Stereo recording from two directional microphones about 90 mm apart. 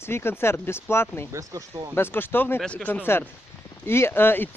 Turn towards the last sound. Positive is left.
turn(degrees=25)  # may be behind; listen again after turning